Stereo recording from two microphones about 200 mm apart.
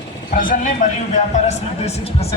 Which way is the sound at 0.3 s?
40° left (ahead or behind).